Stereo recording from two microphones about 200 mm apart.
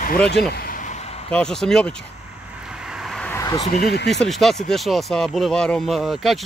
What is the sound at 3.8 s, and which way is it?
Speech, 55° left (ahead or behind).